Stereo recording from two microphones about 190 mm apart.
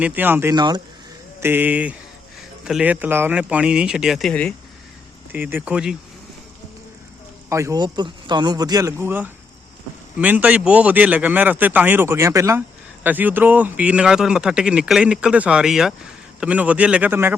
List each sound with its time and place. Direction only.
0.0 s speech: 10° right (ahead or behind)
1.4 s speech: 10° right (ahead or behind); by 4.5 s 5° left (ahead or behind)
5.3 s speech: 10° right (ahead or behind)
7.5 s speech: 15° right (ahead or behind)